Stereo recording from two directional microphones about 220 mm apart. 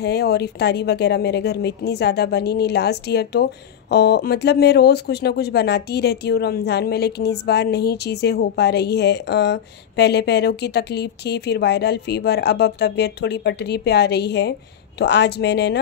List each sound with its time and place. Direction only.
0.0 s speech: 50° left (ahead or behind)